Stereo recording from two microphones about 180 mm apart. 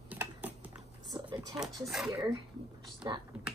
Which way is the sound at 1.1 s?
20° right (ahead or behind).